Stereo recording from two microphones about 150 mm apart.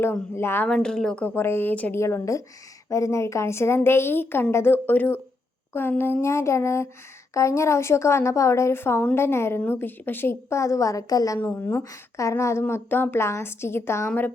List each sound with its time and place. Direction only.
0.0 s a woman's voice: 15° left (ahead or behind)
11.3 s a woman's voice: 10° left (ahead or behind)